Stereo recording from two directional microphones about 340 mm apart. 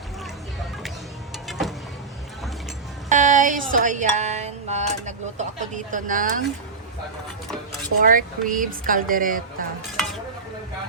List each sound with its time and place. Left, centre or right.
1.5 s vehicle: centre
3.1 s a sound: right
8.1 s a woman's voice: right